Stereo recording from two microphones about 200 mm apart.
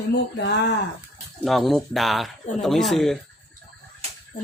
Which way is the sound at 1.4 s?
Centre (ahead or behind).